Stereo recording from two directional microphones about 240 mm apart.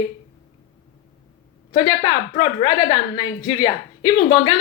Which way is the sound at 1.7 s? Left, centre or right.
Centre.